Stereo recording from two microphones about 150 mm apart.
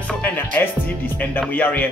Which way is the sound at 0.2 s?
10° left (ahead or behind).